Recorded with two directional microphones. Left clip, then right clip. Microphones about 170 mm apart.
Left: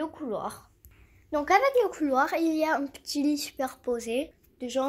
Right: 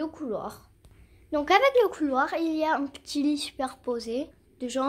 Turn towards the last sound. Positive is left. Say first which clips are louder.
# even
turn(degrees=-5)  # may be behind; listen again after turning